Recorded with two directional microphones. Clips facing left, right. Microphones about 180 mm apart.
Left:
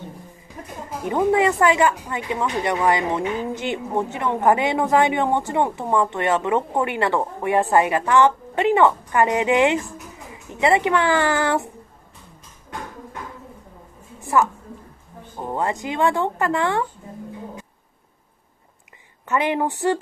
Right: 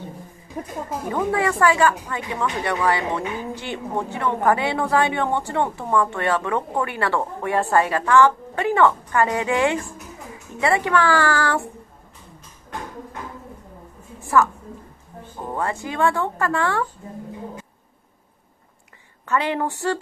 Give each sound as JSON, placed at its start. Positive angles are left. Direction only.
{"t": 1.0, "sound": "speech", "side_deg": 20}
{"t": 14.2, "sound": "a woman's voice", "side_deg": 20}
{"t": 19.2, "sound": "a woman's voice", "side_deg": 15}